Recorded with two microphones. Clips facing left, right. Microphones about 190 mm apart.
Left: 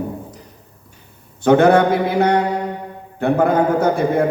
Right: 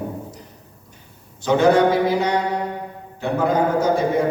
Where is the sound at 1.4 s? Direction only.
55° left (ahead or behind).